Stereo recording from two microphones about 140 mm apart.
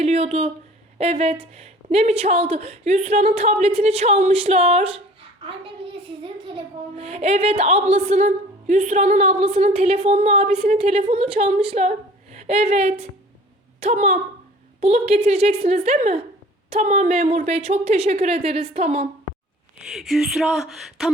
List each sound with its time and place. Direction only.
0.0 s a woman's voice: 50° right (ahead or behind)
19.9 s speech: centre (ahead or behind)